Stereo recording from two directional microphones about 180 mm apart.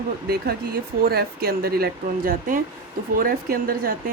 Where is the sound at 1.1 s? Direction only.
60° right (ahead or behind).